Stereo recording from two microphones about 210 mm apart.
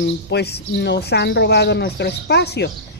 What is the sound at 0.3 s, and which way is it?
Speech, 55° left (ahead or behind).